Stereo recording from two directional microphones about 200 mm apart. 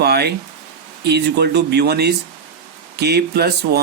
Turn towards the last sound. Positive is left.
turn(degrees=-55)  # may be behind; listen again after turning